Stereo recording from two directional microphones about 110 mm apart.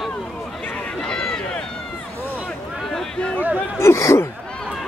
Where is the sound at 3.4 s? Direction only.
15° right (ahead or behind).